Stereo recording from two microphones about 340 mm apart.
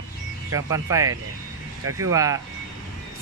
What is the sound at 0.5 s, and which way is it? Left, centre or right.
Speech, centre.